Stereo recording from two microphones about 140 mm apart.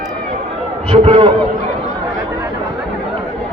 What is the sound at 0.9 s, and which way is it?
Speech, 40° right (ahead or behind).